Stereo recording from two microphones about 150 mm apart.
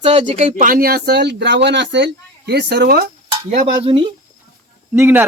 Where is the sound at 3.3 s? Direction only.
35° right (ahead or behind).